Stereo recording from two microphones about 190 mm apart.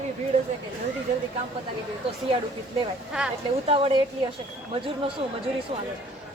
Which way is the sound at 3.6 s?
30° right (ahead or behind).